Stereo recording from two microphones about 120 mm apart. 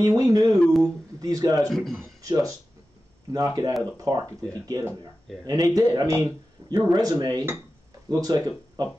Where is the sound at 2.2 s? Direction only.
30° right (ahead or behind).